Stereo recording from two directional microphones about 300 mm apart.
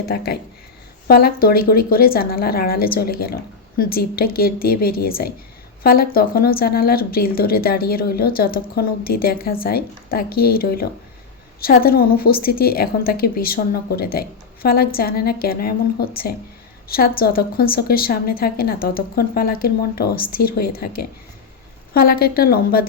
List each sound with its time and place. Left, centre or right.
0.0 s speech: left